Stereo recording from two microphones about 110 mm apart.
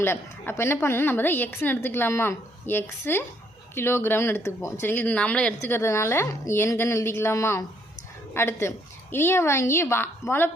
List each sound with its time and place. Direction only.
0.0 s a woman's voice: 20° left (ahead or behind)
5.6 s a woman's voice: 25° left (ahead or behind)